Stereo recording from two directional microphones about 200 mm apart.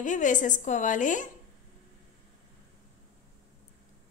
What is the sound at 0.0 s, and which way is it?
A woman's voice, 40° left (ahead or behind).